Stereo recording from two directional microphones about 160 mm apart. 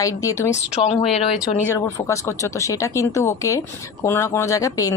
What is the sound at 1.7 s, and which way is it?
Speech, 20° left (ahead or behind).